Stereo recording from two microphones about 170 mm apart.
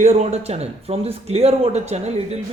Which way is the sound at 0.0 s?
40° right (ahead or behind).